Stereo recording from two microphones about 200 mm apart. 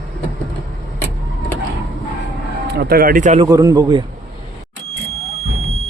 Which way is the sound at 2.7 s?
50° right (ahead or behind).